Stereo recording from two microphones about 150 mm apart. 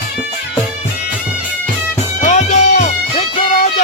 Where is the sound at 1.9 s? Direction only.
55° left (ahead or behind).